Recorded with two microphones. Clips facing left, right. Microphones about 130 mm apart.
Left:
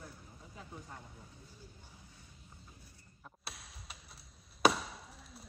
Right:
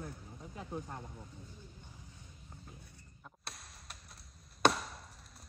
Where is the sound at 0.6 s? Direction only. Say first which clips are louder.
Right 7 dB; 90° right.